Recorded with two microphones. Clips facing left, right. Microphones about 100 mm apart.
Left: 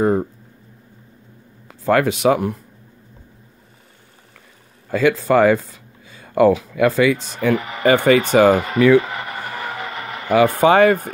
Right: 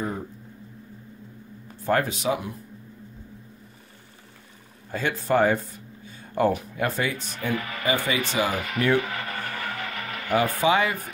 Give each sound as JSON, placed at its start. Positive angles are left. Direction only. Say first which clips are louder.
{"t": 0.0, "sound": "speech", "louder": "left 13 dB", "side_deg": 70}
{"t": 1.7, "sound": "speech", "louder": "left 7 dB", "side_deg": 90}
{"t": 4.9, "sound": "speech", "louder": "left 8 dB", "side_deg": 90}
{"t": 7.5, "sound": "speech", "louder": "left 7 dB", "side_deg": 20}
{"t": 7.8, "sound": "speech", "louder": "left 13 dB", "side_deg": 65}
{"t": 8.6, "sound": "a sound", "louder": "left 10 dB", "side_deg": 25}
{"t": 10.5, "sound": "speech", "louder": "left 9 dB", "side_deg": 55}